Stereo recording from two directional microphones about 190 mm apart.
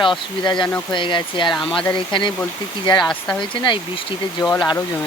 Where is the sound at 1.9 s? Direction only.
25° left (ahead or behind).